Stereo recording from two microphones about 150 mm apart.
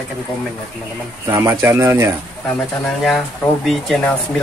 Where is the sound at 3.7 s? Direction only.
5° left (ahead or behind).